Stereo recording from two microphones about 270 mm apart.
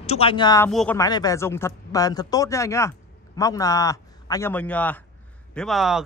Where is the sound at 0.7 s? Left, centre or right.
Centre.